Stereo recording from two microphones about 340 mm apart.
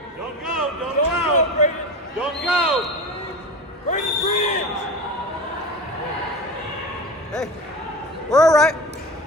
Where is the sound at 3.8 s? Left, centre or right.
Left.